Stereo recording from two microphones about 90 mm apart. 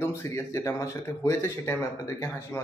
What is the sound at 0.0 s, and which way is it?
Speech, 30° left (ahead or behind).